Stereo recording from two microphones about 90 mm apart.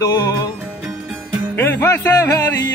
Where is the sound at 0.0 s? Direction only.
40° left (ahead or behind).